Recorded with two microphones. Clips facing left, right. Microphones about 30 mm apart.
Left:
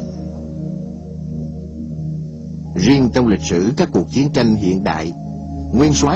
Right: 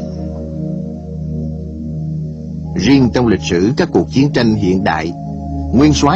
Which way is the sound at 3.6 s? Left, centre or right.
Right.